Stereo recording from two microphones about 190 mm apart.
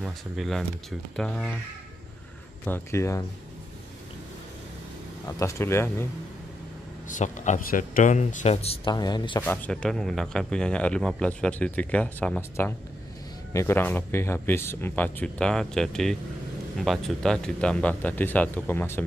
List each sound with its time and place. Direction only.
0.0 s speech: centre (ahead or behind)
2.6 s speech: 10° left (ahead or behind)
5.2 s speech: 15° left (ahead or behind)
7.1 s speech: 40° left (ahead or behind); by 9.4 s 25° left (ahead or behind)
9.4 s speech: 5° left (ahead or behind)